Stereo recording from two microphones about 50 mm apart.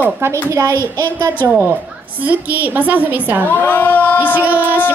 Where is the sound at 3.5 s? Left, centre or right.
Left.